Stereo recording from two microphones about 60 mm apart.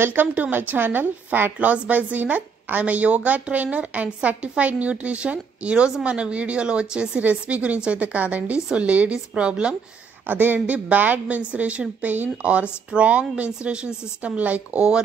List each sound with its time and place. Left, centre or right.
0.0 s a woman's voice: right; by 9.8 s centre
10.2 s a woman's voice: right